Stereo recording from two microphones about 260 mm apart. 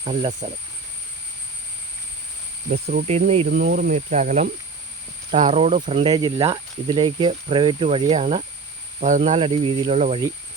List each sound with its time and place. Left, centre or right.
0.0 s speech: right
2.7 s speech: right
3.5 s speech: right